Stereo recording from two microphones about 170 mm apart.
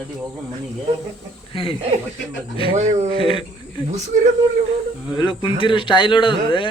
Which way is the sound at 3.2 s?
30° left (ahead or behind).